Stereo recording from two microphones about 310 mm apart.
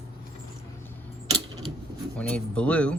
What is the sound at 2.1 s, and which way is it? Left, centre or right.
Speech, centre.